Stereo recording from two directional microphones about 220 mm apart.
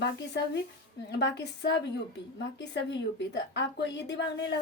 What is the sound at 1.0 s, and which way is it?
Speech, 50° left (ahead or behind).